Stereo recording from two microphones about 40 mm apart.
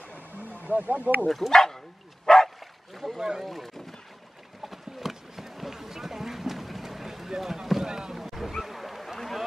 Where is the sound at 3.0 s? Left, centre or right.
Centre.